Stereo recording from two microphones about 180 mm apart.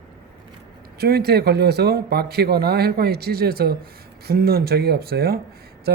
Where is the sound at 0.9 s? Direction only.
60° right (ahead or behind).